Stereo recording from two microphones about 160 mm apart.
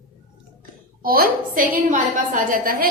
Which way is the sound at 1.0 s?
65° right (ahead or behind).